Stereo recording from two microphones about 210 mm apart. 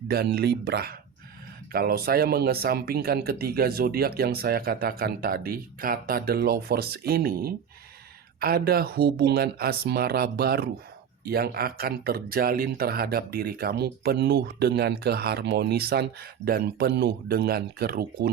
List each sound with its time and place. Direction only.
0.1 s speech: 50° right (ahead or behind)